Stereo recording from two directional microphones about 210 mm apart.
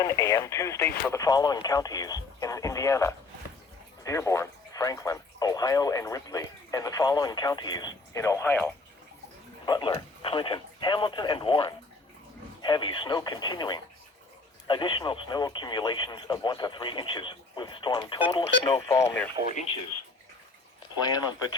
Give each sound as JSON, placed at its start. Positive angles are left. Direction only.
{"t": 0.0, "sound": "speech", "side_deg": 15}